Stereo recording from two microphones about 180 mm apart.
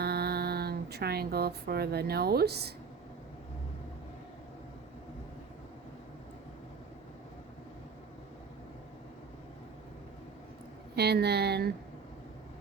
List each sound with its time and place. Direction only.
0.0 s speech: 60° right (ahead or behind)
10.9 s speech: 65° right (ahead or behind)